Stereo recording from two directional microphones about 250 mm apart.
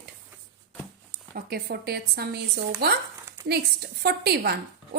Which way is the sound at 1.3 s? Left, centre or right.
Right.